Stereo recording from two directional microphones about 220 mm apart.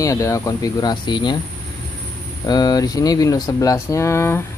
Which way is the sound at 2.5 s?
15° left (ahead or behind).